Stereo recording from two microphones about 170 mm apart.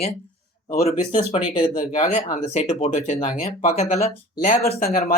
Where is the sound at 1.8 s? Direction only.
50° left (ahead or behind).